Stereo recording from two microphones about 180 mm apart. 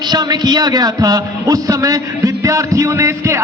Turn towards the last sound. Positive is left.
turn(degrees=-15)  # may be behind; listen again after turning